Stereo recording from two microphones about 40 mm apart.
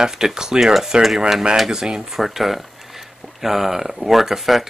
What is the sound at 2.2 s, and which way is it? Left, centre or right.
Speech, centre.